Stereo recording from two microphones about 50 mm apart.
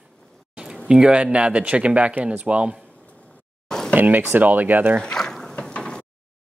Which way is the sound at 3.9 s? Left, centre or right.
Right.